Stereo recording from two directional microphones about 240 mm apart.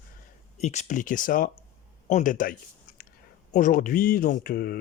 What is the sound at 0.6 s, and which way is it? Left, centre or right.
Speech, left.